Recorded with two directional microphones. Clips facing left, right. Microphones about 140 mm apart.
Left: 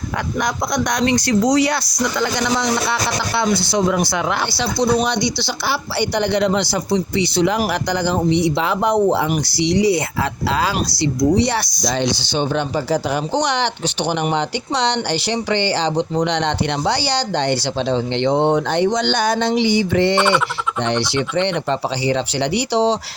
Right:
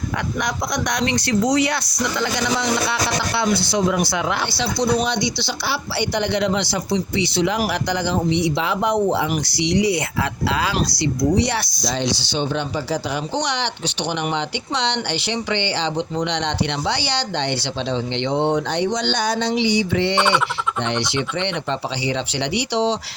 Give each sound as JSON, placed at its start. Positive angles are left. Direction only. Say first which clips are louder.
{"t": 0.3, "sound": "speech", "louder": "left 5 dB", "side_deg": 35}
{"t": 3.9, "sound": "speech", "louder": "left 2 dB", "side_deg": 40}